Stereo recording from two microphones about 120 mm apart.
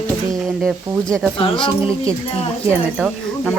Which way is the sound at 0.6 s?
5° left (ahead or behind).